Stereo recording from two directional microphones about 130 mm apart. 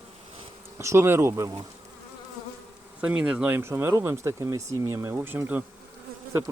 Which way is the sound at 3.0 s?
10° right (ahead or behind).